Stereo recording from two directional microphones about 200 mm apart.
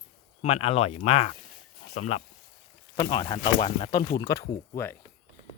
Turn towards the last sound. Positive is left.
turn(degrees=10)  # may be behind; listen again after turning